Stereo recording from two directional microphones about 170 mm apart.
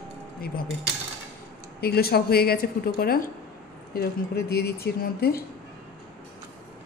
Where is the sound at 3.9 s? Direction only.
70° left (ahead or behind).